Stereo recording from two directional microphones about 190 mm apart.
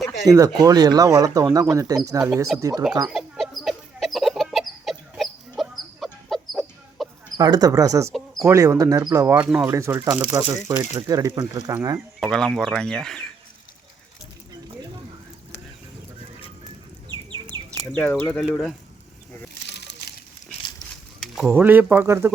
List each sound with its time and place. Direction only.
0.3 s speech: 20° right (ahead or behind)
3.1 s chicken: centre (ahead or behind)
7.3 s speech: 20° right (ahead or behind)
12.2 s speech: centre (ahead or behind)
17.1 s chicken: 25° right (ahead or behind)
17.7 s speech: 10° left (ahead or behind)
19.6 s a sound: 65° left (ahead or behind)
21.2 s speech: 5° right (ahead or behind)